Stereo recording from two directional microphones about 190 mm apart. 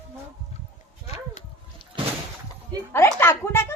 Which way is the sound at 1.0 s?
40° left (ahead or behind).